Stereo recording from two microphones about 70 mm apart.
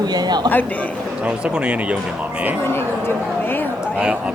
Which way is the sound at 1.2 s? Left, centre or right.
Centre.